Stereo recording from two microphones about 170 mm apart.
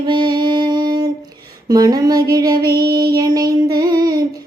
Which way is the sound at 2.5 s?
60° right (ahead or behind).